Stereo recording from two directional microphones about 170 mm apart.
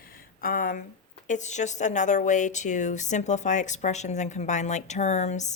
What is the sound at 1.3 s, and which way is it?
A woman's voice, 45° left (ahead or behind).